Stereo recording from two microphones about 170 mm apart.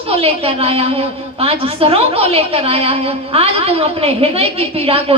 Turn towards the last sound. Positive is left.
turn(degrees=-35)  # may be behind; listen again after turning